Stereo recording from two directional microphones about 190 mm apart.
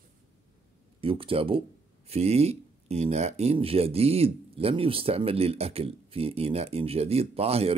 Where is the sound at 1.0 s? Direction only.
30° right (ahead or behind).